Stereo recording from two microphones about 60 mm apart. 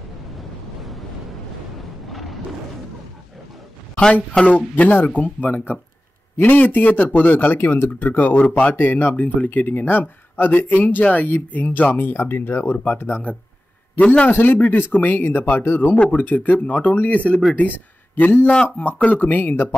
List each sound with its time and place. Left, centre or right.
0.4 s waves: centre
2.0 s a sound: centre
4.6 s speech: left
14.3 s speech: left